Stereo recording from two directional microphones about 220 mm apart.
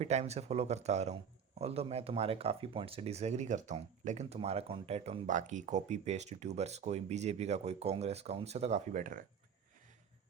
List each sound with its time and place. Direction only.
0.0 s speech: 30° right (ahead or behind)